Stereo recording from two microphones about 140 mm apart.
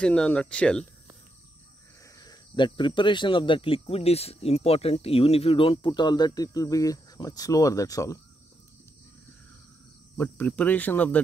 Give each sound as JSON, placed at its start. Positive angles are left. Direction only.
{"t": 0.0, "sound": "speech", "side_deg": 5}
{"t": 2.1, "sound": "speech", "side_deg": 30}
{"t": 10.1, "sound": "speech", "side_deg": 15}